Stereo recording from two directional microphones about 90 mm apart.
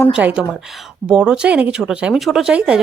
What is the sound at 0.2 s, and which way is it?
Speech, 15° right (ahead or behind).